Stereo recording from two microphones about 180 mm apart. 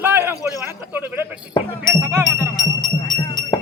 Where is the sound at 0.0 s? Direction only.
10° right (ahead or behind).